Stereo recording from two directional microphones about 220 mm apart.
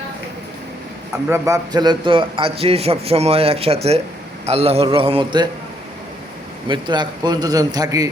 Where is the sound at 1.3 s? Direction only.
15° right (ahead or behind).